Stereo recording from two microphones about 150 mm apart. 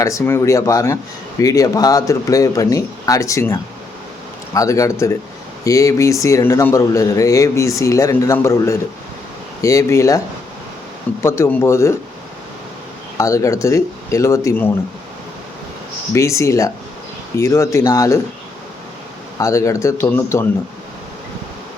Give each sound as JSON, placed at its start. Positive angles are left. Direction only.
{"t": 0.0, "sound": "speech", "side_deg": 20}
{"t": 11.2, "sound": "speech", "side_deg": 20}
{"t": 13.1, "sound": "speech", "side_deg": 20}
{"t": 16.1, "sound": "speech", "side_deg": 20}
{"t": 19.4, "sound": "speech", "side_deg": 20}